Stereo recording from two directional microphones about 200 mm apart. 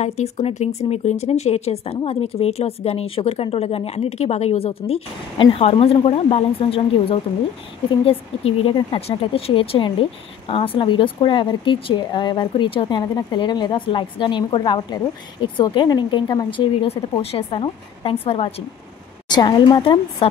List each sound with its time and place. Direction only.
0.0 s speech: 30° left (ahead or behind)